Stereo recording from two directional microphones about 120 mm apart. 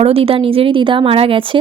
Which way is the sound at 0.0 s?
50° right (ahead or behind).